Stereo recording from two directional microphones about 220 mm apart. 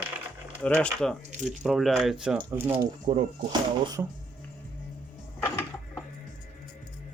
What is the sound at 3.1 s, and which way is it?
Speech, 20° right (ahead or behind).